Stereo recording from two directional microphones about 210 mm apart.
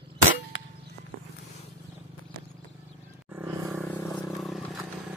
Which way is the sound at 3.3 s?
10° right (ahead or behind).